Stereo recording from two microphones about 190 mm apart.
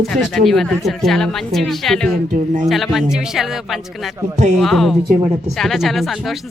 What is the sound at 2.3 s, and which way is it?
Speech, 40° right (ahead or behind).